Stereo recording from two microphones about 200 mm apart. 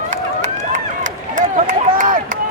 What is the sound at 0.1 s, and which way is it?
Run, 40° right (ahead or behind).